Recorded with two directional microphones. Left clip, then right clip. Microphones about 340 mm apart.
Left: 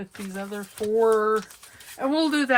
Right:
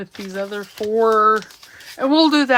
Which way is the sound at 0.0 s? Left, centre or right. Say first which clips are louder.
Right 8 dB; centre.